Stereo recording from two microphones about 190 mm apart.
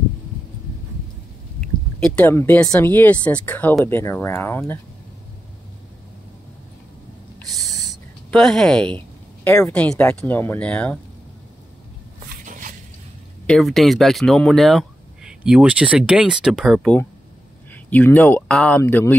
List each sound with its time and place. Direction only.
2.0 s speech: 5° left (ahead or behind)
7.5 s speech: centre (ahead or behind)
12.4 s a sound: 45° right (ahead or behind)
13.5 s speech: centre (ahead or behind)